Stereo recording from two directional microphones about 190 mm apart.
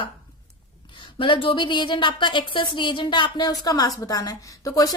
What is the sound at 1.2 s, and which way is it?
A woman's voice, 25° left (ahead or behind).